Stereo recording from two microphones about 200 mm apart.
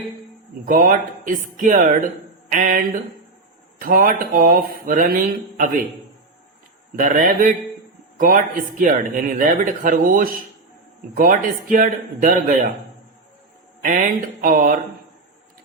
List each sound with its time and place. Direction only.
0.6 s speech: 45° right (ahead or behind)
2.5 s a sound: 40° right (ahead or behind)
3.8 s speech: 45° right (ahead or behind)
6.9 s speech: 40° right (ahead or behind)
13.8 s speech: 40° right (ahead or behind)